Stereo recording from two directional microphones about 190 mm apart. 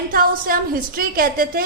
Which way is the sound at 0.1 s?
50° right (ahead or behind).